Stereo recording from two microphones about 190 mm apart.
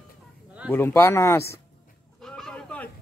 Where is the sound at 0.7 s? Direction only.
10° left (ahead or behind).